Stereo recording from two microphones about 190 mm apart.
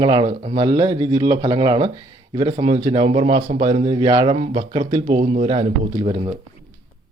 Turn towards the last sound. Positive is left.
turn(degrees=-25)  # may be behind; listen again after turning